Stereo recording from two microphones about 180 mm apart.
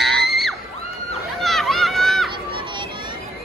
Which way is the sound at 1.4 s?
Centre (ahead or behind).